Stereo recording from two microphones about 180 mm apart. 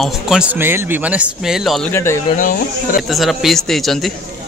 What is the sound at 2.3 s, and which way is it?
Speech, 50° left (ahead or behind).